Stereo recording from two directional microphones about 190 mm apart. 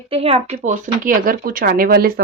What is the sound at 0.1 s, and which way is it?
Speech, 30° right (ahead or behind).